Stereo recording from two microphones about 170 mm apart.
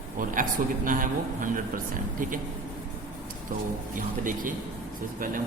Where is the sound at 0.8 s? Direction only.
50° right (ahead or behind).